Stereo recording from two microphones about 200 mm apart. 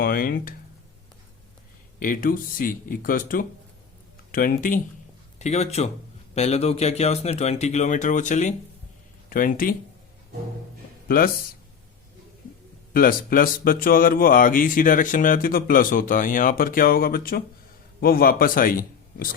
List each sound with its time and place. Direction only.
0.0 s speech: 45° left (ahead or behind)
2.0 s speech: 45° left (ahead or behind)
5.4 s speech: 35° left (ahead or behind)
12.9 s speech: 45° left (ahead or behind)